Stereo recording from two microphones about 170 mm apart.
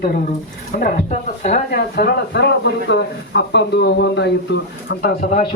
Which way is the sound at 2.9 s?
90° left.